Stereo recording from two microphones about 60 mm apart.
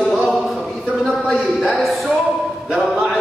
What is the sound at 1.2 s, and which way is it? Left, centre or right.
Speech, centre.